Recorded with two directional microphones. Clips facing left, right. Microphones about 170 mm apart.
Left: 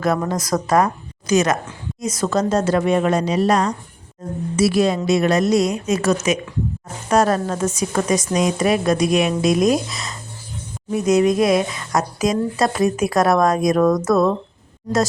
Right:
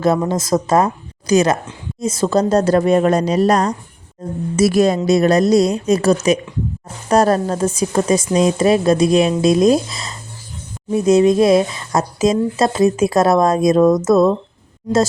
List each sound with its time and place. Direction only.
0.0 s a woman's voice: 25° right (ahead or behind)